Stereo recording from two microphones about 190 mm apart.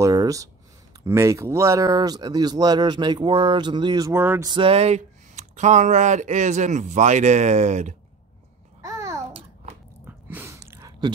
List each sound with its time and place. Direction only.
0.0 s speech: 20° right (ahead or behind)
4.5 s speech: 30° right (ahead or behind)
8.8 s babbling: 15° right (ahead or behind)
10.0 s a sound: 10° right (ahead or behind)